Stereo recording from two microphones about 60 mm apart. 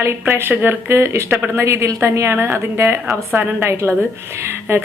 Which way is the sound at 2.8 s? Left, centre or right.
Right.